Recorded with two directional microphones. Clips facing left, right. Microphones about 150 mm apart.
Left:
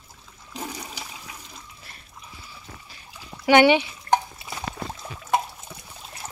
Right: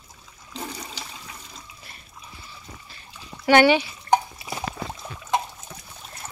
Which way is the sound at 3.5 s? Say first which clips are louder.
Even; 15° left (ahead or behind).